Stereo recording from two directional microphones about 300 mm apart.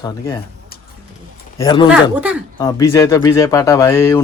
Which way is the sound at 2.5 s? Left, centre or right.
Centre.